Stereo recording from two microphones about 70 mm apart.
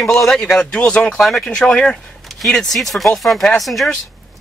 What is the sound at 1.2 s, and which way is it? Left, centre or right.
Speech, centre.